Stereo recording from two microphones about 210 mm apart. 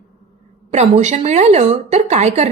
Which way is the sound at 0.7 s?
35° right (ahead or behind).